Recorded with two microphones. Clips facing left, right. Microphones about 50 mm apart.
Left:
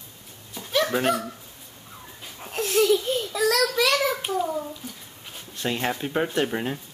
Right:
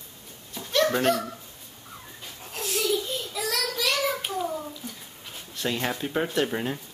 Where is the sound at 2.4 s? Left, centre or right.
Left.